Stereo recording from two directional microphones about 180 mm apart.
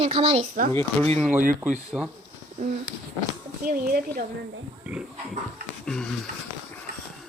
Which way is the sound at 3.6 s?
55° right (ahead or behind).